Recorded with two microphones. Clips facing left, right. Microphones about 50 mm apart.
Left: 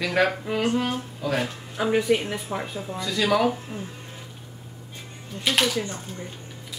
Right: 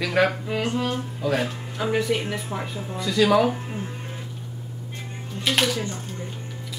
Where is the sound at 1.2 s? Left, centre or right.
Centre.